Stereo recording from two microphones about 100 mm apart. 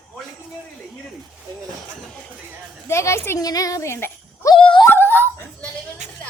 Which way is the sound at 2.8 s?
30° left (ahead or behind).